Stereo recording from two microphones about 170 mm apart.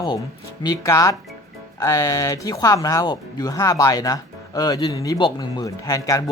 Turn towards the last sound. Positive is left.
turn(degrees=20)  # may be behind; listen again after turning